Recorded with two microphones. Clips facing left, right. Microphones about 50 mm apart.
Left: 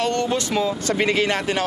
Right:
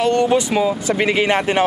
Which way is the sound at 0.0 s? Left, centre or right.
Centre.